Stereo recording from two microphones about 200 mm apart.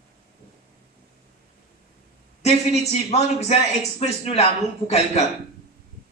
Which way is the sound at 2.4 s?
30° left (ahead or behind).